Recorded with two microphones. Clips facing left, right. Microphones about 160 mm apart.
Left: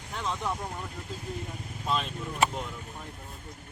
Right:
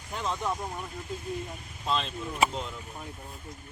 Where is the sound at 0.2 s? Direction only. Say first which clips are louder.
Right 1 dB; centre (ahead or behind).